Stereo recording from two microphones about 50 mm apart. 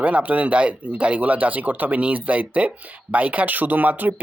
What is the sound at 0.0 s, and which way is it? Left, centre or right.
Speech, right.